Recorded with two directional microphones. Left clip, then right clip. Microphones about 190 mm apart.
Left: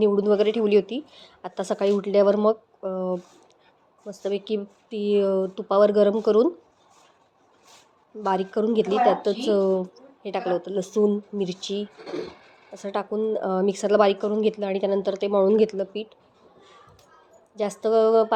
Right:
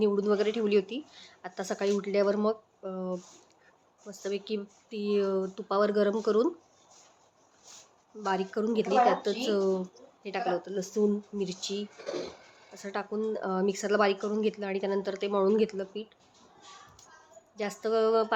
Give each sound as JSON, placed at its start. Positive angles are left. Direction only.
{"t": 0.0, "sound": "a woman's voice", "side_deg": 20}
{"t": 8.2, "sound": "a woman's voice", "side_deg": 20}
{"t": 17.5, "sound": "a woman's voice", "side_deg": 20}